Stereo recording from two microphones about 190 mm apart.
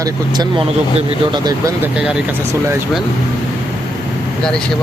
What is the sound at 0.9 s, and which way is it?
Speech, 20° right (ahead or behind).